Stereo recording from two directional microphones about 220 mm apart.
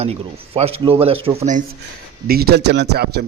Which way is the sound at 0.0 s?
25° right (ahead or behind).